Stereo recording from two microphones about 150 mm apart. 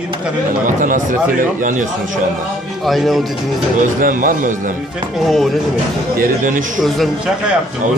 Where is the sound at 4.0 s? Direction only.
65° right (ahead or behind).